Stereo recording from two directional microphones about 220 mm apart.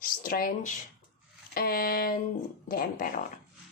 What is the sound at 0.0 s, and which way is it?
A woman's voice, 40° left (ahead or behind).